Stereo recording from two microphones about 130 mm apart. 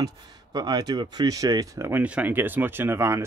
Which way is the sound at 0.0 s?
35° right (ahead or behind).